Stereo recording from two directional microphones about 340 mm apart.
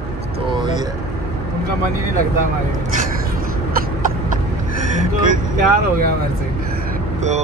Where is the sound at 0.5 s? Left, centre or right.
Centre.